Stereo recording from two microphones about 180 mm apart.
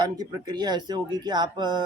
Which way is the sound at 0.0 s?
20° right (ahead or behind).